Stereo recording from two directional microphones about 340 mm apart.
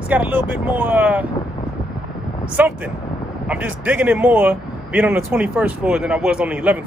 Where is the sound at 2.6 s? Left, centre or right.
Centre.